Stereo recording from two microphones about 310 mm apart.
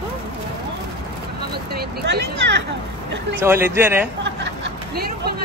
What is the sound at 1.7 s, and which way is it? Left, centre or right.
Speech, right.